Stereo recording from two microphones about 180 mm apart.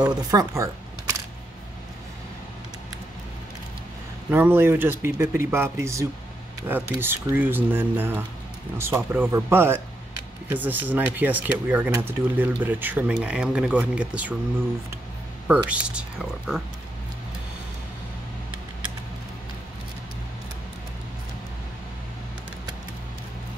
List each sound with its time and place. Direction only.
0.0 s speech: 20° right (ahead or behind)
4.3 s speech: 10° right (ahead or behind)
15.4 s speech: 5° right (ahead or behind)